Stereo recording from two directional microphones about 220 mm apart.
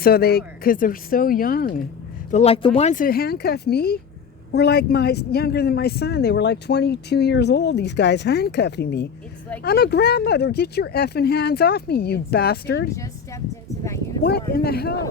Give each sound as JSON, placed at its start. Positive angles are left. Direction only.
{"t": 0.0, "sound": "speech", "side_deg": 45}
{"t": 2.3, "sound": "speech", "side_deg": 25}
{"t": 12.9, "sound": "speech", "side_deg": 15}
{"t": 14.3, "sound": "speech", "side_deg": 45}